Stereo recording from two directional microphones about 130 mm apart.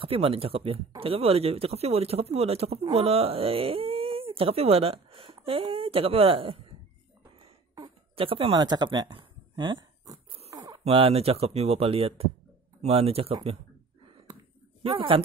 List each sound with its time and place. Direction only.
0.0 s speech: 45° right (ahead or behind)
7.7 s a sound: 40° right (ahead or behind)
10.5 s bird: 30° right (ahead or behind)
10.8 s speech: 50° right (ahead or behind)
14.8 s speech: 45° right (ahead or behind)